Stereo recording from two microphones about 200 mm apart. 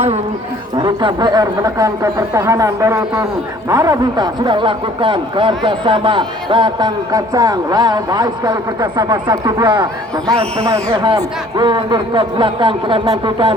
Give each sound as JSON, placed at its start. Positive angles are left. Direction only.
{"t": 0.8, "sound": "a man's voice", "side_deg": -20}